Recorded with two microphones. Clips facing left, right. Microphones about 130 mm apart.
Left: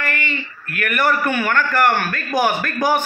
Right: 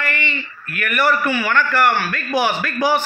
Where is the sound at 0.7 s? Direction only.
50° left (ahead or behind).